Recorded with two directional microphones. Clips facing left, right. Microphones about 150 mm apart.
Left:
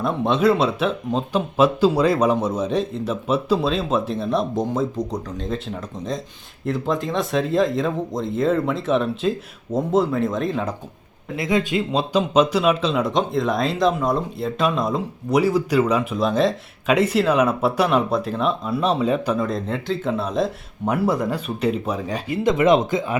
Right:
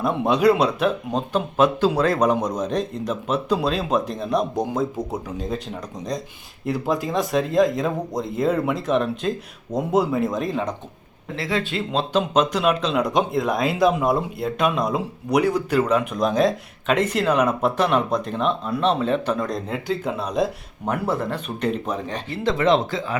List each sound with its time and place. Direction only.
0.0 s speech: centre (ahead or behind)
11.3 s speech: 15° left (ahead or behind); by 21.0 s centre (ahead or behind)
21.1 s speech: 10° left (ahead or behind)
22.3 s speech: 20° left (ahead or behind)